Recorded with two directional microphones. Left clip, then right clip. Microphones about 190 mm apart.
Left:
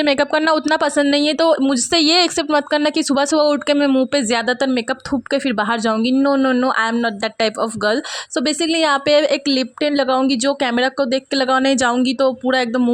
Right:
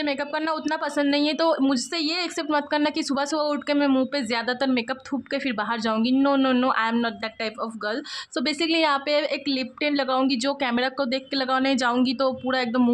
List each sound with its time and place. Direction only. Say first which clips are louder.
0.0 s speech: left 10 dB; 50° left (ahead or behind); by 12.8 s 30° left (ahead or behind)